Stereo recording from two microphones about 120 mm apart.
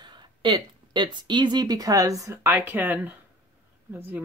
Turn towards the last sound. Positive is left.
turn(degrees=-15)  # may be behind; listen again after turning